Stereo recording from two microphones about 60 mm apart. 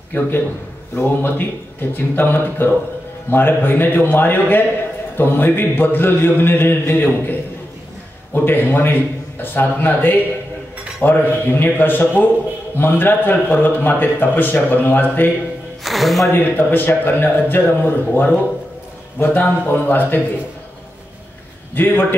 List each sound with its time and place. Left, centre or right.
0.1 s a man's voice: left
8.5 s a man's voice: left
15.8 s music: centre
16.3 s a man's voice: left
21.7 s a man's voice: left